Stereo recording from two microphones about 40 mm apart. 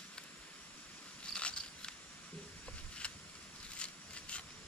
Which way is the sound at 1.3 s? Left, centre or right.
Left.